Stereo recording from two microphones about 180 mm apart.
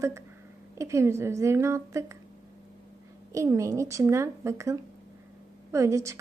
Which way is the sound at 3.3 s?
15° right (ahead or behind).